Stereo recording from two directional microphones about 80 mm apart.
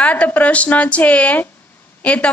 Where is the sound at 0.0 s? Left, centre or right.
Centre.